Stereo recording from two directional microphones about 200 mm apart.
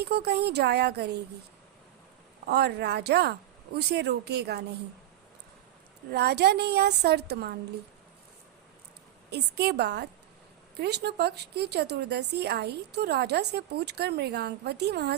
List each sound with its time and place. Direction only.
0.0 s speech: 55° right (ahead or behind)
2.5 s speech: 55° right (ahead or behind)
6.1 s speech: 55° right (ahead or behind)
9.3 s speech: 55° right (ahead or behind)